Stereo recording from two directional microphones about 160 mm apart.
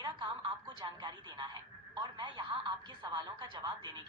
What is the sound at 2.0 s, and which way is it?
Radio, 30° right (ahead or behind).